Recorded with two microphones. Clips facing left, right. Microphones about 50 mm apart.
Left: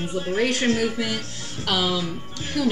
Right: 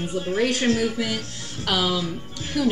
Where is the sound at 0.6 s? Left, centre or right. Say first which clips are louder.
Even; left.